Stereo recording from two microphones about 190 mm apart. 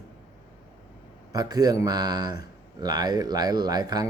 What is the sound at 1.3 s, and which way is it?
Speech, 20° right (ahead or behind).